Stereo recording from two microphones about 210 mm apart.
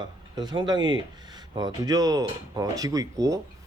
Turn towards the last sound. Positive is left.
turn(degrees=-15)  # may be behind; listen again after turning